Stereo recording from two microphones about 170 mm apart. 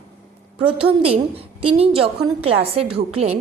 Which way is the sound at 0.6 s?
35° right (ahead or behind).